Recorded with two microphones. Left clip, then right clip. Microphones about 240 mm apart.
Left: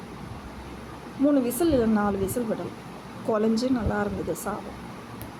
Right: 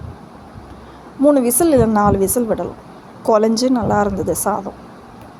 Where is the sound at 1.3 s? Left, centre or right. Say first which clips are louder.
Right 10 dB; right.